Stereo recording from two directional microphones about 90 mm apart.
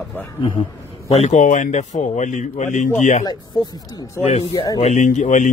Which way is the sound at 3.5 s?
50° left (ahead or behind).